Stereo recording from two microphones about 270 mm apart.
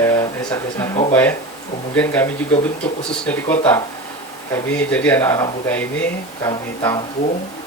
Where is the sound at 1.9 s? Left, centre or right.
Centre.